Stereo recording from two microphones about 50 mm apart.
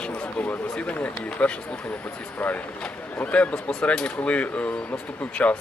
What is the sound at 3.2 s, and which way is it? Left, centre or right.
Speech, left.